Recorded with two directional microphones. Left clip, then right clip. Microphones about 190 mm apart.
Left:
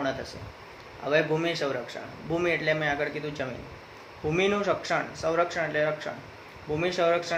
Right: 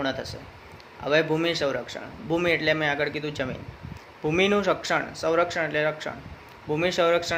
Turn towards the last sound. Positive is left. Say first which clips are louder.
# right 3 dB
turn(degrees=-55)  # may be behind; listen again after turning